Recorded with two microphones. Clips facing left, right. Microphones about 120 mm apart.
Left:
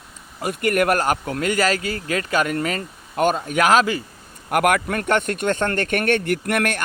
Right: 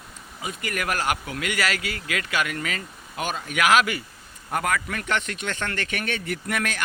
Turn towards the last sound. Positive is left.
turn(degrees=60)  # may be behind; listen again after turning